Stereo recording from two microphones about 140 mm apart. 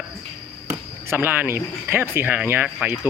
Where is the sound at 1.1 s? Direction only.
15° right (ahead or behind).